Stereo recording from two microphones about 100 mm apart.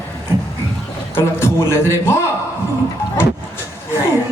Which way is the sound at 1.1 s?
25° left (ahead or behind).